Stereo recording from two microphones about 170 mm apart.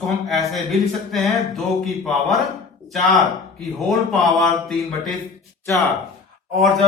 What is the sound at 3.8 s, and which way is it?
Speech, centre (ahead or behind).